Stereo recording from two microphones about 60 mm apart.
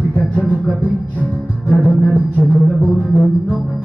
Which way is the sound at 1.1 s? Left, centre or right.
Left.